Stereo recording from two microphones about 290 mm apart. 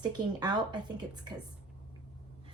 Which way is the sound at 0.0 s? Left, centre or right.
Centre.